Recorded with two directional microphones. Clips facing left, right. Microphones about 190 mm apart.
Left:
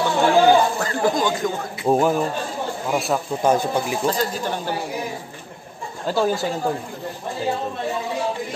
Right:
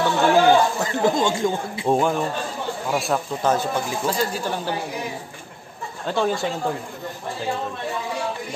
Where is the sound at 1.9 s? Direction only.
5° left (ahead or behind).